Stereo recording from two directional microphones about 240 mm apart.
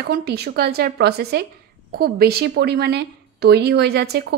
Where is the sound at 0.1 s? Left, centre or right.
Right.